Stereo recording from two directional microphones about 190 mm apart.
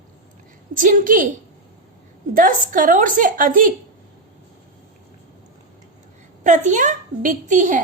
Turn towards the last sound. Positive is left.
turn(degrees=-40)  # may be behind; listen again after turning